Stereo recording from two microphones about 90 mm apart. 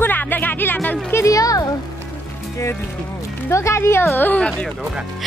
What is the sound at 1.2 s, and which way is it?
Speech, 40° left (ahead or behind).